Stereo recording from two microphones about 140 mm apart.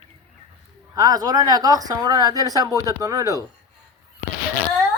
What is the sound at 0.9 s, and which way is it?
Speech, 25° right (ahead or behind).